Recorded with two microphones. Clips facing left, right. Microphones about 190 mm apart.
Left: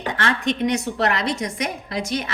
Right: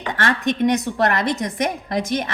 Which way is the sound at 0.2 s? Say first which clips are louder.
Right 3 dB; 45° right (ahead or behind).